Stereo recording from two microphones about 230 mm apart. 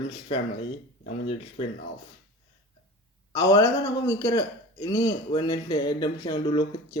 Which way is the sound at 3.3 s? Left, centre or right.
Centre.